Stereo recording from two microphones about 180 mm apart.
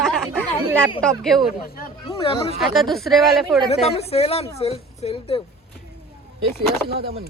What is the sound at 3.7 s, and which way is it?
Speech, 35° left (ahead or behind).